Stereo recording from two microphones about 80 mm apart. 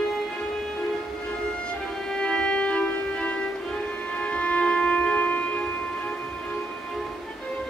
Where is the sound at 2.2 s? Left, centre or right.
Centre.